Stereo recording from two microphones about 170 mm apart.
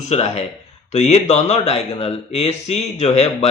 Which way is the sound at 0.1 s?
40° left (ahead or behind).